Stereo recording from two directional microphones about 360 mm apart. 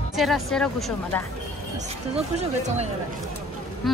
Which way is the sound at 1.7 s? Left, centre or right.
Centre.